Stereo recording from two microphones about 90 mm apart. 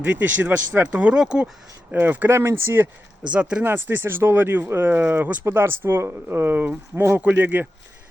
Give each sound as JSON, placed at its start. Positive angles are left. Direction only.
{"t": 0.0, "sound": "speech", "side_deg": -20}
{"t": 3.3, "sound": "speech", "side_deg": -10}
{"t": 3.6, "sound": "speech", "side_deg": -25}